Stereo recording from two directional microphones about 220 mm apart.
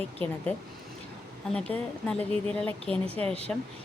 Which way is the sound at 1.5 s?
5° left (ahead or behind).